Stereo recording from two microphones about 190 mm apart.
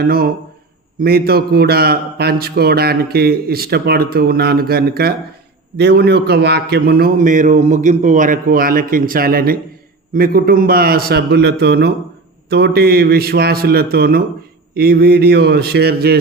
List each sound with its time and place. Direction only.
0.0 s a man's voice: 50° right (ahead or behind)